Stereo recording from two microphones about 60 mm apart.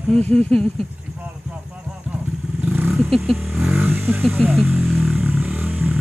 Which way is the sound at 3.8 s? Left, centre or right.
Right.